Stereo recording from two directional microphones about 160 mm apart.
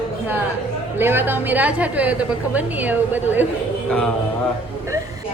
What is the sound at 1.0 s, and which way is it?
A woman's voice, 15° right (ahead or behind).